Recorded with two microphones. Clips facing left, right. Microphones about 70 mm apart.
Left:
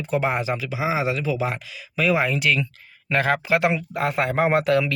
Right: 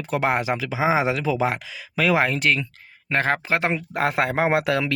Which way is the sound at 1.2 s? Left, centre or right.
Right.